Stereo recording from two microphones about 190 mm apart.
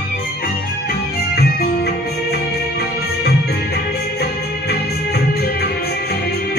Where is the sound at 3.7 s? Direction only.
60° left (ahead or behind).